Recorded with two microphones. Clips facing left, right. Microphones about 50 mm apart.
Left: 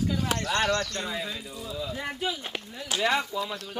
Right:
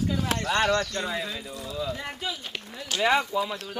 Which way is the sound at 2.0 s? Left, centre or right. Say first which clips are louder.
Left 2 dB; centre.